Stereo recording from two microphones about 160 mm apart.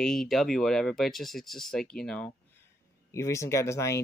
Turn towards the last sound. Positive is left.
turn(degrees=15)  # may be behind; listen again after turning